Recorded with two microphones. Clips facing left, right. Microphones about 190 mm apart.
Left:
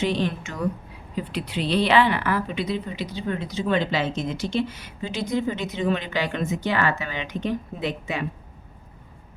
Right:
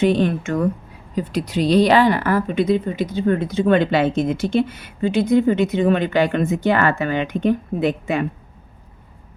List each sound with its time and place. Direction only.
0.0 s a woman's voice: 50° right (ahead or behind)
1.1 s a woman's voice: 40° right (ahead or behind)